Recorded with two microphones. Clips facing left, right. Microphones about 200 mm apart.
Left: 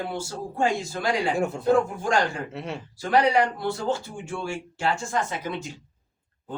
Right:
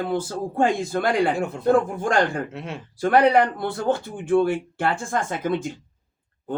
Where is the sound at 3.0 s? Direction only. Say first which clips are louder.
Right 4 dB; 55° right (ahead or behind).